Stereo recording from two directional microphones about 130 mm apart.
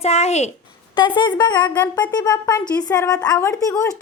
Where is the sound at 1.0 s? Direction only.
35° left (ahead or behind).